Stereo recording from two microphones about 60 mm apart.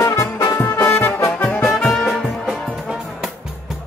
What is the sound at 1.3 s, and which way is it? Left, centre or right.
Music, left.